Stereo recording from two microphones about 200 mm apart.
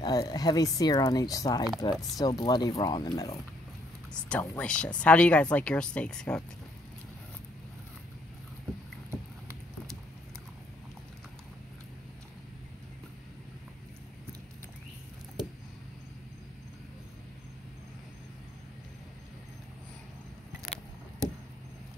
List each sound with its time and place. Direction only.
0.0 s speech: 20° left (ahead or behind)
4.1 s speech: 5° left (ahead or behind)
9.1 s a sound: 15° right (ahead or behind)